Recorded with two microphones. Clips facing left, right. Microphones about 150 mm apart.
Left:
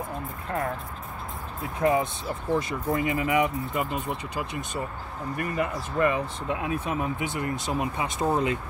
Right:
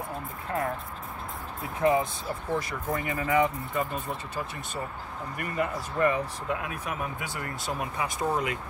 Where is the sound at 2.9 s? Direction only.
20° left (ahead or behind).